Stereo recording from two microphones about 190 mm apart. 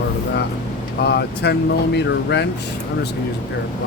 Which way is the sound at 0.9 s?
60° left (ahead or behind).